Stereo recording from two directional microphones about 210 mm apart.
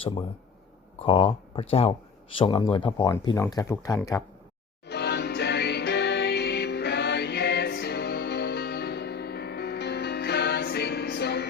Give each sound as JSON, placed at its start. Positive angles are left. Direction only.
{"t": 0.0, "sound": "speech", "side_deg": 25}
{"t": 3.1, "sound": "speech", "side_deg": 15}
{"t": 4.9, "sound": "music", "side_deg": 50}